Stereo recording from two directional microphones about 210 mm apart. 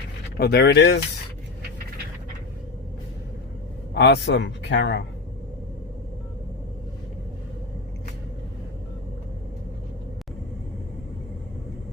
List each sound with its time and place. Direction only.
0.3 s speech: 50° left (ahead or behind)
3.9 s speech: 55° left (ahead or behind)